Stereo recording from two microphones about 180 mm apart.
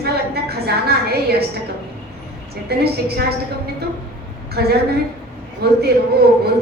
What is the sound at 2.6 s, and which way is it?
Speech, 60° right (ahead or behind).